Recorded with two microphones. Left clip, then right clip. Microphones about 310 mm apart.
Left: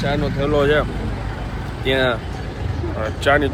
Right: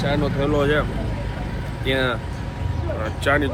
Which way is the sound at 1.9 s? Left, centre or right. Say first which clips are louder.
Left 4 dB; centre.